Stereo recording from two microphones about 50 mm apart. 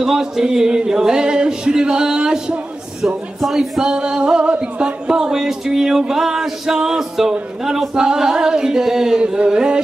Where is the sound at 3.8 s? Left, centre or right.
Centre.